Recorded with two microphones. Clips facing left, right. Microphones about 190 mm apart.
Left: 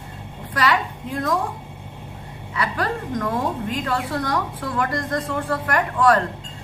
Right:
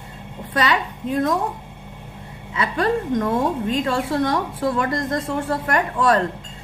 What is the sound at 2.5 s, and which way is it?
A woman's voice, 25° right (ahead or behind).